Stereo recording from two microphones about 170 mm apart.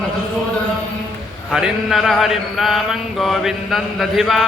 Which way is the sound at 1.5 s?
Centre (ahead or behind).